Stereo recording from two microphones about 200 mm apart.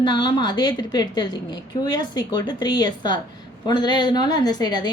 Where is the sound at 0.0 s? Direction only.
20° left (ahead or behind).